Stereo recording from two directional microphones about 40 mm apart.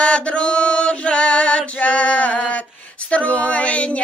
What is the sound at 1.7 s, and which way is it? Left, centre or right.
Female singing, left.